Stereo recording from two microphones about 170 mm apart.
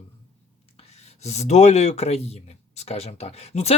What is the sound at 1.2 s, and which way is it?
Speech, 40° left (ahead or behind).